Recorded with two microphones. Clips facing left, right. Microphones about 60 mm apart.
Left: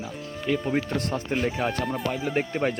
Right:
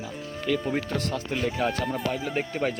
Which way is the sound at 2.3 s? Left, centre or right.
Left.